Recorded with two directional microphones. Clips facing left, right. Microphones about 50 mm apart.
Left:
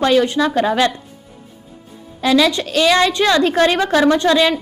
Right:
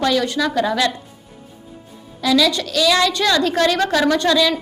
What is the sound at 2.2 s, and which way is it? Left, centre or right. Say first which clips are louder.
A woman's voice: left 2 dB; left.